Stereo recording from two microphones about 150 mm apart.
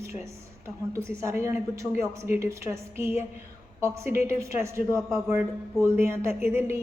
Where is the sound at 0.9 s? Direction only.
20° right (ahead or behind).